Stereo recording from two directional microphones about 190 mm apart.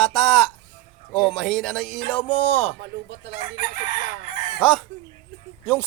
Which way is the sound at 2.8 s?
70° right (ahead or behind).